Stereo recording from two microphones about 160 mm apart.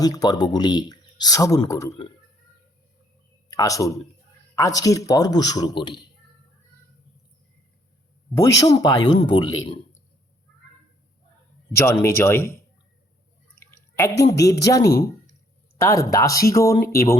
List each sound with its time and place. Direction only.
0.0 s speech: 25° left (ahead or behind)
3.5 s speech: 20° left (ahead or behind)
8.4 s speech: 25° left (ahead or behind)
11.9 s speech: 15° left (ahead or behind)
13.6 s drip: 15° left (ahead or behind)
14.6 s speech: 20° left (ahead or behind)